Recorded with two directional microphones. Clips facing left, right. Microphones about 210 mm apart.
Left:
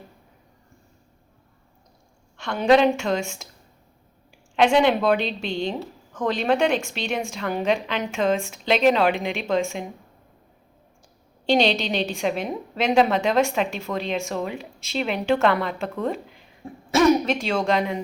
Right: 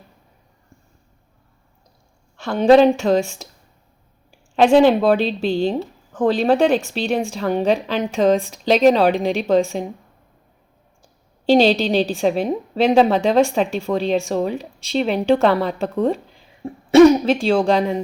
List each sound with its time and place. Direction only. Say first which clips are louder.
2.4 s a woman's voice: right 6 dB; 35° right (ahead or behind)
4.5 s a woman's voice: right 6 dB; 35° right (ahead or behind)
11.4 s a woman's voice: right 6 dB; 35° right (ahead or behind)